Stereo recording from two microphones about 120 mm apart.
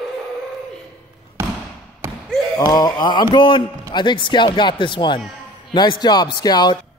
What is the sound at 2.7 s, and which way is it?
A man's voice, 35° left (ahead or behind).